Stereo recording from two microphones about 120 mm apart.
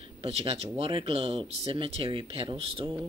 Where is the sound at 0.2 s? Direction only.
60° right (ahead or behind).